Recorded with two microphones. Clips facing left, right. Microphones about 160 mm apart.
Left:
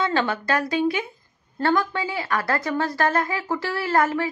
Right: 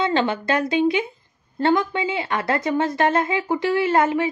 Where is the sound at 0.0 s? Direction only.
20° right (ahead or behind).